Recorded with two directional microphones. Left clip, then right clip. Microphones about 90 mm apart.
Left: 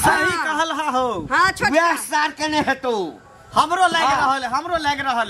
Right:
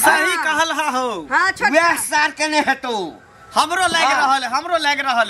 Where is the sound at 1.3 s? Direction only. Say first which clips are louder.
Right 1 dB; 15° left (ahead or behind).